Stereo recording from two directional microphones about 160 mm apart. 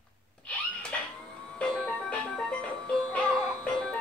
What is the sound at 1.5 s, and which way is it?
Music, 5° left (ahead or behind).